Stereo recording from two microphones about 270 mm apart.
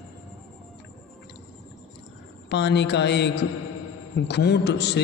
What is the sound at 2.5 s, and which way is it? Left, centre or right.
A man's voice, left.